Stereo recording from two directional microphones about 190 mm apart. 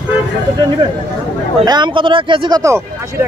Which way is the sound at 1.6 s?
25° right (ahead or behind).